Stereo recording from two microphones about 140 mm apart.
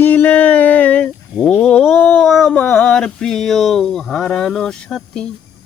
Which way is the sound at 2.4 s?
5° left (ahead or behind).